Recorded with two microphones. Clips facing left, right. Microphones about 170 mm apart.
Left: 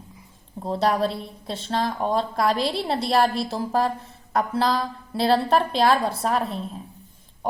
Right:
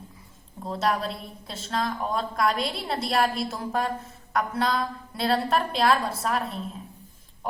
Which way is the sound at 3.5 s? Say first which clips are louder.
Left 5 dB; 30° left (ahead or behind).